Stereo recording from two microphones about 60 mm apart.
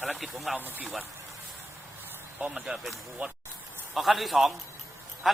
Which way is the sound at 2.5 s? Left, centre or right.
Centre.